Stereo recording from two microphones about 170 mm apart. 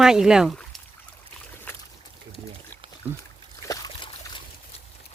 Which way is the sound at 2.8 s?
30° right (ahead or behind).